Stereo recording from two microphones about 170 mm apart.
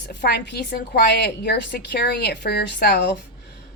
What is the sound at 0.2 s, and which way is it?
A woman's voice, 65° left (ahead or behind).